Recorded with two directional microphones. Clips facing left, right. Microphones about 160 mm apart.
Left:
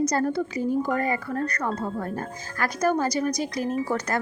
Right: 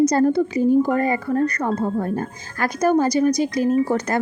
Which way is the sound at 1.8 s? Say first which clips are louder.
Right 7 dB; 30° right (ahead or behind).